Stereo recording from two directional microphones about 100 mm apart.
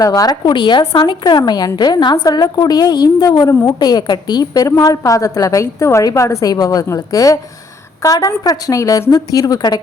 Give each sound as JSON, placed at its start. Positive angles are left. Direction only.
{"t": 0.0, "sound": "a woman's voice", "side_deg": 40}
{"t": 3.5, "sound": "a woman's voice", "side_deg": 25}
{"t": 3.8, "sound": "a woman's voice", "side_deg": 45}